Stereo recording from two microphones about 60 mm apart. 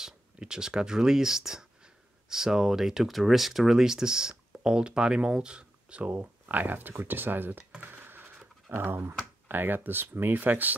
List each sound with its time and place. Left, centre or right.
0.0 s speech: centre; by 7.6 s right
7.8 s a sound: right
8.6 s speech: right